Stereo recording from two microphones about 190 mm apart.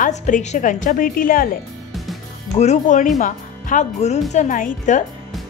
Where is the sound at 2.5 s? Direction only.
35° left (ahead or behind).